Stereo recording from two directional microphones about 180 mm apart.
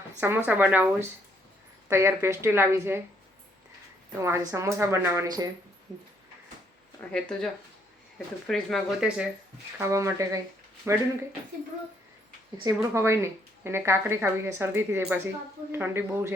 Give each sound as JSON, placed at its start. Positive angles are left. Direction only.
{"t": 0.2, "sound": "a woman's voice", "side_deg": -10}
{"t": 4.1, "sound": "a woman's voice", "side_deg": -15}
{"t": 7.1, "sound": "speech", "side_deg": 5}
{"t": 9.7, "sound": "a woman's voice", "side_deg": -15}
{"t": 12.6, "sound": "a woman's voice", "side_deg": -15}